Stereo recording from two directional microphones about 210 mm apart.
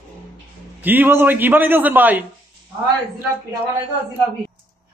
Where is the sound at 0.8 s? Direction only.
10° right (ahead or behind).